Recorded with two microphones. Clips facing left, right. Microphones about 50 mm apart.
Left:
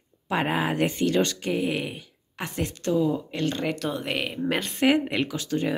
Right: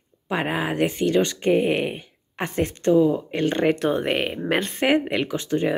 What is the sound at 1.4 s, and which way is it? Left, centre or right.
Speech, right.